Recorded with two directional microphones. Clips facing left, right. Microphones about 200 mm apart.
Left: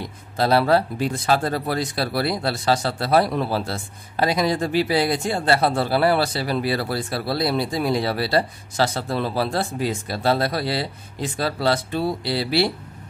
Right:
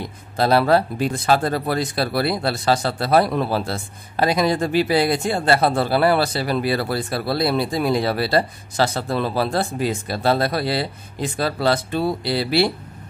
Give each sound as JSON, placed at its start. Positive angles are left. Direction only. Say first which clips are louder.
{"t": 0.4, "sound": "speech", "louder": "right 1 dB", "side_deg": -50}